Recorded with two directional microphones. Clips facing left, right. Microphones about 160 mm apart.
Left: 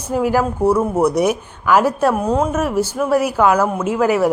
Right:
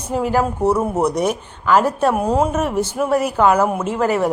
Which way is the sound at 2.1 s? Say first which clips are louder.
Even; 5° right (ahead or behind).